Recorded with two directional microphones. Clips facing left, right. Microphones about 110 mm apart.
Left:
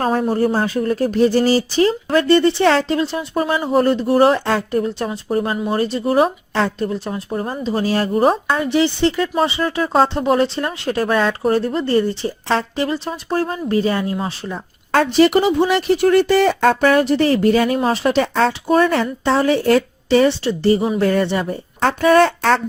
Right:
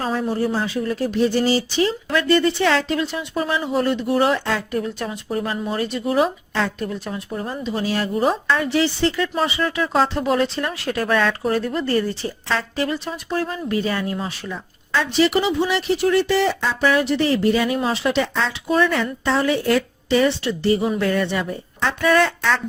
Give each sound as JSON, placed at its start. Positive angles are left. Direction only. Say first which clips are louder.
{"t": 0.0, "sound": "speech", "louder": "left 5 dB", "side_deg": 45}
{"t": 8.5, "sound": "speech", "louder": "left 3 dB", "side_deg": 20}
{"t": 14.9, "sound": "speech", "louder": "left 5 dB", "side_deg": 45}
{"t": 19.2, "sound": "speech", "louder": "left 4 dB", "side_deg": 30}